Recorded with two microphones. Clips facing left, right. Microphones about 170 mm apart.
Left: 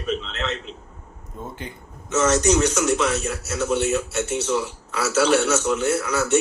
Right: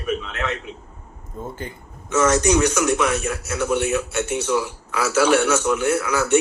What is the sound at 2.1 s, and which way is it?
A man's voice, 60° right (ahead or behind).